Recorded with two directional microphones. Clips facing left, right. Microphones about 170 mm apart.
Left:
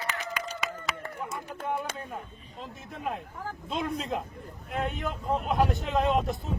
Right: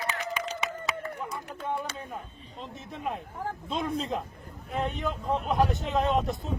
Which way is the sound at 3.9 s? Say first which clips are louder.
Right 1 dB; centre (ahead or behind).